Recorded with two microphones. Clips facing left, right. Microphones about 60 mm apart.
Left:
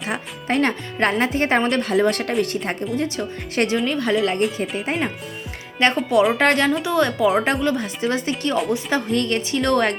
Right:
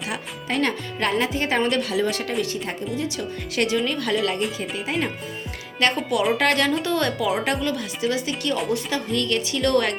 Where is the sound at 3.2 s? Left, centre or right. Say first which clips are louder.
Left 2 dB; left.